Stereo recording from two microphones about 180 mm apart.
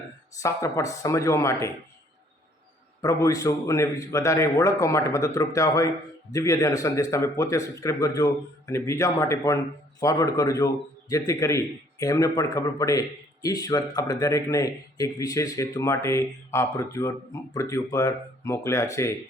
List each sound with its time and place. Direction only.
0.3 s a man's voice: 15° left (ahead or behind)
3.0 s a man's voice: 20° left (ahead or behind)